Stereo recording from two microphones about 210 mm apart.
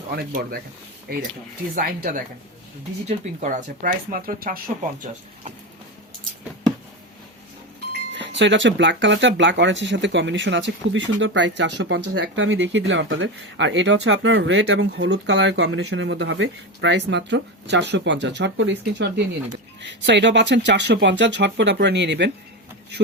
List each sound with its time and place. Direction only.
0.2 s speech: 45° right (ahead or behind)
1.7 s speech: 40° right (ahead or behind)
8.1 s speech: 60° right (ahead or behind)